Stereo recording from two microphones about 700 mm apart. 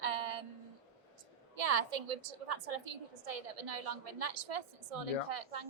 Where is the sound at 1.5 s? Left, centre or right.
Right.